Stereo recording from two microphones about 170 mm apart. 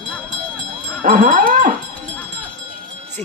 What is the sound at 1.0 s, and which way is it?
Music, 50° right (ahead or behind).